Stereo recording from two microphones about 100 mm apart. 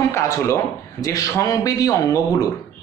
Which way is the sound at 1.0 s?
35° left (ahead or behind).